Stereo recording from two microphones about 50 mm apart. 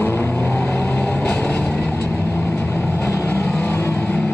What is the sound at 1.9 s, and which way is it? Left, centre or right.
Vehicle, left.